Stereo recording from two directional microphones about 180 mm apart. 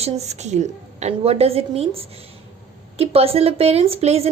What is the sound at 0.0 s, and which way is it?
A woman's voice, 40° right (ahead or behind).